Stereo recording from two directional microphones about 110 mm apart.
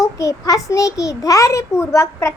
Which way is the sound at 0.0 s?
30° left (ahead or behind).